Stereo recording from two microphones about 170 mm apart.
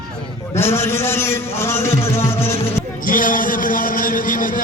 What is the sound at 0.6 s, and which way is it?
A man's voice, 15° left (ahead or behind).